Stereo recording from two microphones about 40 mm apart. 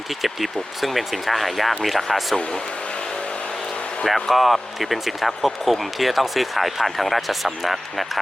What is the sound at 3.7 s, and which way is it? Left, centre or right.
Vehicle, left.